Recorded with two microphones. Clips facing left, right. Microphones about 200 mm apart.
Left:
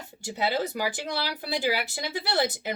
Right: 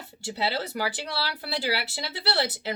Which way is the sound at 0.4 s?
15° left (ahead or behind).